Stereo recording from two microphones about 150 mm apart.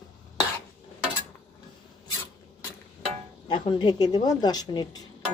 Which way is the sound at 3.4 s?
30° left (ahead or behind).